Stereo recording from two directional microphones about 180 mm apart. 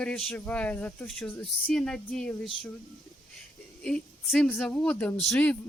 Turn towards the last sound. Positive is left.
turn(degrees=5)  # may be behind; listen again after turning